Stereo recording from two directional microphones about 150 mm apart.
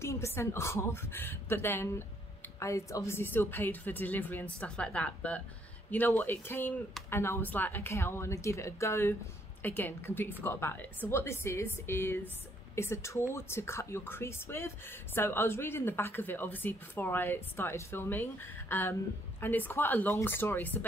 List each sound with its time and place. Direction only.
0.0 s speech: 20° left (ahead or behind)